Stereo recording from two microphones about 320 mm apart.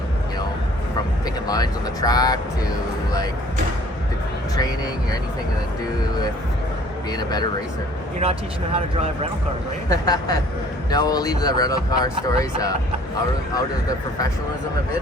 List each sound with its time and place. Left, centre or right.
1.5 s speech: centre
7.1 s speech: centre
8.2 s speech: centre
9.9 s speech: centre